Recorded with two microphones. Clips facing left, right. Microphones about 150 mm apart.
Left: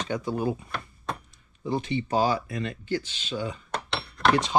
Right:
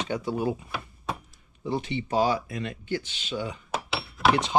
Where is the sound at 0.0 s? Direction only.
10° right (ahead or behind).